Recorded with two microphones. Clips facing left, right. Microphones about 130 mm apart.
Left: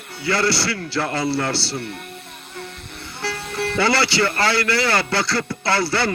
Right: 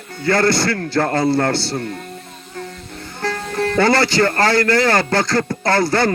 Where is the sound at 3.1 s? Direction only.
50° right (ahead or behind).